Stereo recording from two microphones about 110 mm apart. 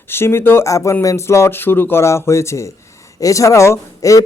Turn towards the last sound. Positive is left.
turn(degrees=25)  # may be behind; listen again after turning